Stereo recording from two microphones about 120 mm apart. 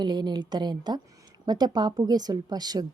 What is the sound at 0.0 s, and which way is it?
A woman's voice, 35° right (ahead or behind).